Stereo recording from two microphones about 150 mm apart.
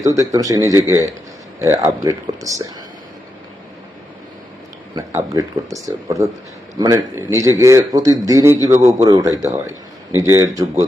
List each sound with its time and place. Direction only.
0.0 s a man's voice: 20° right (ahead or behind)
4.9 s a man's voice: 20° right (ahead or behind)